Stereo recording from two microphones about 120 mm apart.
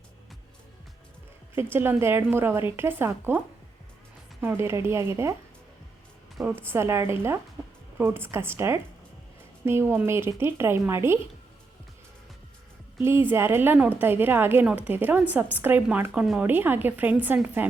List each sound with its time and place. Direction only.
1.5 s a woman's voice: 20° right (ahead or behind)
6.7 s a woman's voice: 20° right (ahead or behind)
13.0 s a woman's voice: 20° right (ahead or behind)